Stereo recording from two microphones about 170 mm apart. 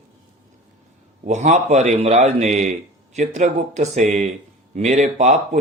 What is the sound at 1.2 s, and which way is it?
A man's voice, 45° right (ahead or behind).